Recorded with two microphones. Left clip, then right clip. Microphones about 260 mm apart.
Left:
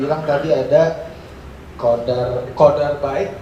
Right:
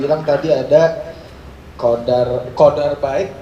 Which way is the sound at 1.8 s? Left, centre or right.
Right.